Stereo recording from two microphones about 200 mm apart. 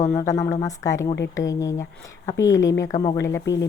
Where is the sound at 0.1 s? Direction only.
15° left (ahead or behind).